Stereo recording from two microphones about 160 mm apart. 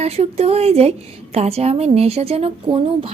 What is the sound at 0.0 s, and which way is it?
A woman's voice, 40° right (ahead or behind).